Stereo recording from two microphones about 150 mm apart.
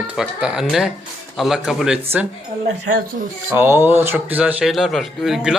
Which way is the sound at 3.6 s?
15° right (ahead or behind).